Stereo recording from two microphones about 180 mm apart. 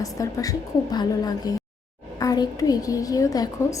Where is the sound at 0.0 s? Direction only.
20° left (ahead or behind).